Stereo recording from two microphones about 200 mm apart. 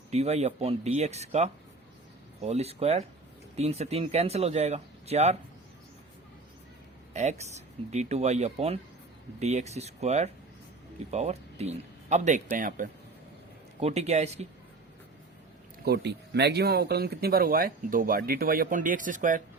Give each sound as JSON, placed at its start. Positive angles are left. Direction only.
{"t": 0.1, "sound": "speech", "side_deg": -35}
{"t": 7.1, "sound": "speech", "side_deg": -35}
{"t": 13.7, "sound": "speech", "side_deg": -30}
{"t": 15.8, "sound": "speech", "side_deg": -55}